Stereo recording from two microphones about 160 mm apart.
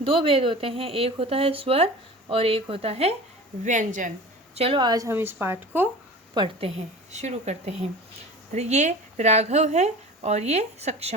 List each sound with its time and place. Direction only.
0.0 s speech: 35° right (ahead or behind)
3.6 s speech: 50° right (ahead or behind)
4.5 s a woman's voice: 35° right (ahead or behind); by 5.9 s 15° right (ahead or behind)
6.3 s speech: 35° right (ahead or behind)